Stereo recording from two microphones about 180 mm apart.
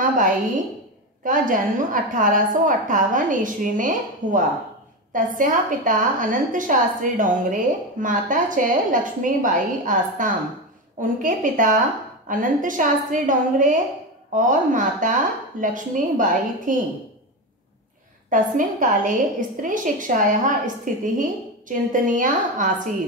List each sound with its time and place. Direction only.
1.2 s a woman's voice: 50° right (ahead or behind)
18.3 s a woman's voice: 45° right (ahead or behind)